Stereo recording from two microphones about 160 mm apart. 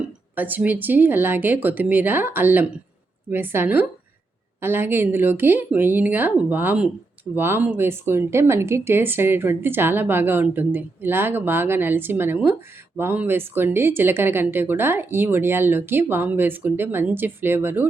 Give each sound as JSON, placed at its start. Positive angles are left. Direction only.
{"t": 0.3, "sound": "speech", "side_deg": -10}